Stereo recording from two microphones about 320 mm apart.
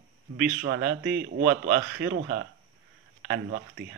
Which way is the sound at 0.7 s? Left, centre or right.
Right.